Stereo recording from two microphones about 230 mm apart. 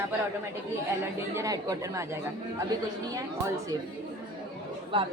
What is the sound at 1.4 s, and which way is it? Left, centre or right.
Speech, centre.